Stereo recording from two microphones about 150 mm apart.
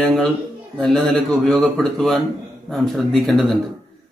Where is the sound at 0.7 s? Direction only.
5° left (ahead or behind).